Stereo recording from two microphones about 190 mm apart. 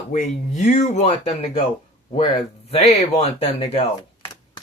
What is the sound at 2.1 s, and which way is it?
Speech, 25° left (ahead or behind).